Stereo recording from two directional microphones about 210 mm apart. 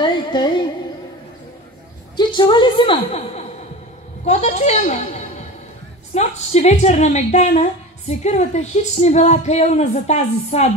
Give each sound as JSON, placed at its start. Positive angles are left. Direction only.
{"t": 0.0, "sound": "carnatic music", "side_deg": 20}
{"t": 2.1, "sound": "a woman's voice", "side_deg": 20}